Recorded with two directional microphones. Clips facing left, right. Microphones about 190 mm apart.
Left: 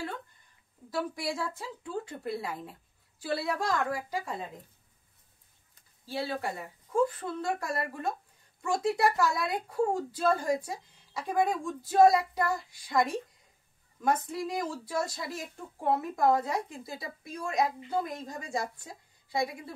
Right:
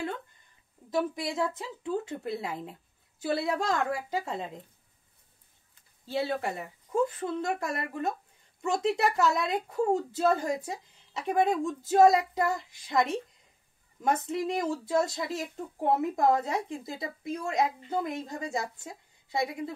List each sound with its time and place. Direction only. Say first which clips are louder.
0.8 s speech: right 3 dB; 20° right (ahead or behind)
6.0 s speech: right 3 dB; 25° right (ahead or behind)